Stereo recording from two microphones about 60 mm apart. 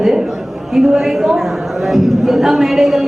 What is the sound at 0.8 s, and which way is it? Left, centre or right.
A woman's voice, centre.